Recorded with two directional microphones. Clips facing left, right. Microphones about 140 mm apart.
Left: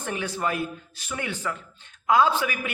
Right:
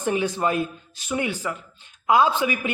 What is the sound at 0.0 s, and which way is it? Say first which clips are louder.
A man's voice: right 6 dB; 20° right (ahead or behind).